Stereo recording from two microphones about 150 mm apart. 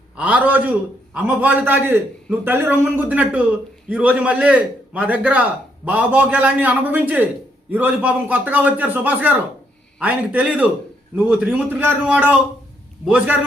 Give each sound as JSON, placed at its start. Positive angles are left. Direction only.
{"t": 0.2, "sound": "a man's voice", "side_deg": -10}